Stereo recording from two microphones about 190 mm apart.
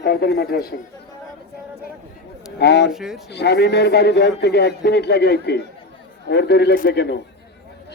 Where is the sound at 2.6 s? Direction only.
65° left (ahead or behind).